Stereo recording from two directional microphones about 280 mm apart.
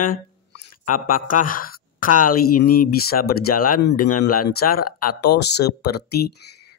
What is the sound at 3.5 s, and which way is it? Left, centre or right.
Speech, left.